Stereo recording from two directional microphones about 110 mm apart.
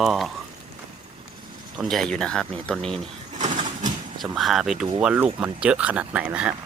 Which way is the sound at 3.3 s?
90° right.